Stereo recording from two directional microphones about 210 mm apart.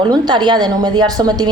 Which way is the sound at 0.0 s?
20° right (ahead or behind).